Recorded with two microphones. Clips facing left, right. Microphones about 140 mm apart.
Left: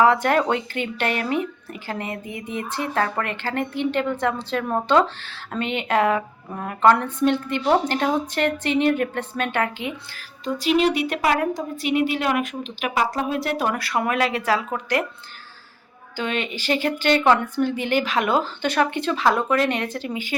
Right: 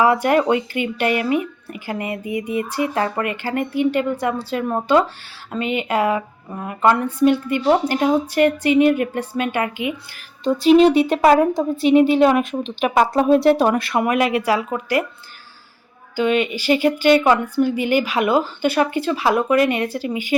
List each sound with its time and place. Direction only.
0.0 s speech: 10° right (ahead or behind)
10.4 s a woman's voice: 35° right (ahead or behind); by 15.0 s 10° right (ahead or behind)
16.1 s speech: 10° right (ahead or behind)